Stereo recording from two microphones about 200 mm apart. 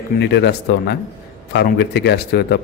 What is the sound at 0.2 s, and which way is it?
A man's voice, 60° left (ahead or behind).